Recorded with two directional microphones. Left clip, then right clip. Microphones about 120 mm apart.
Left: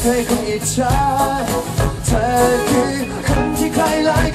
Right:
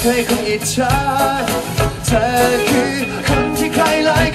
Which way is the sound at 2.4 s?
10° right (ahead or behind).